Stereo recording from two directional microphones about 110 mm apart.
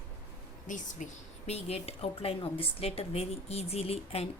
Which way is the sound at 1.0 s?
90° left.